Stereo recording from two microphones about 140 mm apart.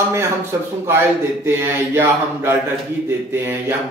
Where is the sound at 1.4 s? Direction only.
15° right (ahead or behind).